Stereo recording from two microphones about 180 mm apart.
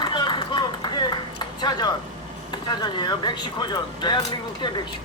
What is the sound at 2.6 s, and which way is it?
Speech, 25° left (ahead or behind).